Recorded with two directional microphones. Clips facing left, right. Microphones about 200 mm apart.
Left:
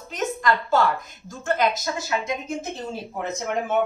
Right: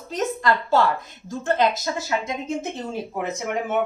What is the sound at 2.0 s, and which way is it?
Speech, 25° right (ahead or behind).